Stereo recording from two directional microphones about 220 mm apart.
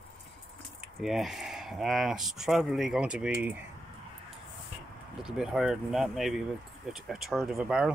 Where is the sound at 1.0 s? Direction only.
Centre (ahead or behind).